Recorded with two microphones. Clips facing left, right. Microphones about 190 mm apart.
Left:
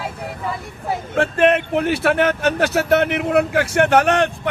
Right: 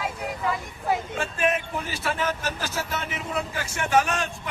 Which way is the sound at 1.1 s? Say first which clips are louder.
Left 10 dB; 65° left (ahead or behind).